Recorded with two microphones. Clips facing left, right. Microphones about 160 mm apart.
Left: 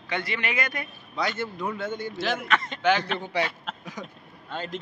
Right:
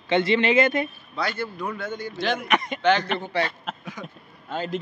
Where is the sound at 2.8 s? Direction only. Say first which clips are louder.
Right 2 dB; 5° left (ahead or behind).